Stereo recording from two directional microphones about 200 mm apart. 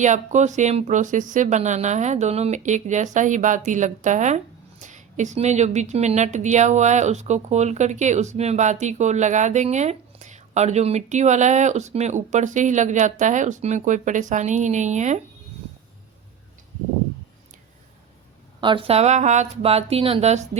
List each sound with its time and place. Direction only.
0.0 s a woman's voice: 35° right (ahead or behind)
18.6 s a woman's voice: 25° right (ahead or behind)